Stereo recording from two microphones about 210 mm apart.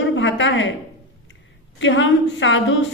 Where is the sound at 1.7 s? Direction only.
60° left (ahead or behind).